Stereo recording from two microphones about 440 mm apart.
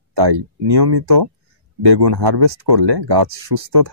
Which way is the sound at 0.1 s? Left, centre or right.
Right.